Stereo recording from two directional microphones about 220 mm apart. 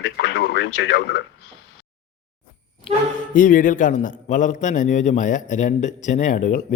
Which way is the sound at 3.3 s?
35° left (ahead or behind).